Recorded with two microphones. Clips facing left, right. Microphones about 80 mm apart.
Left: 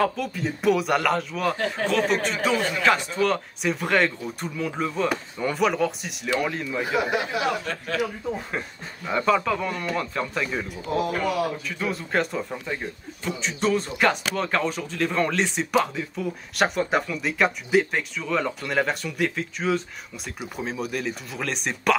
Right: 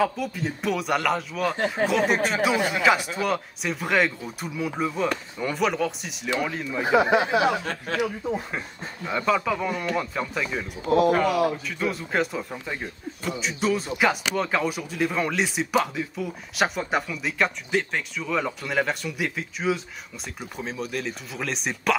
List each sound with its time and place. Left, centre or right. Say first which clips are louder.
0.0 s speech: even; centre
6.8 s speech: right 5 dB; right
8.0 s speech: right 1 dB; centre
11.8 s speech: even; centre